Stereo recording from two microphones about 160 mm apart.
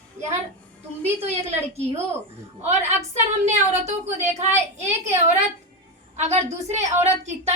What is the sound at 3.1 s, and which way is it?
A child's voice, 45° right (ahead or behind).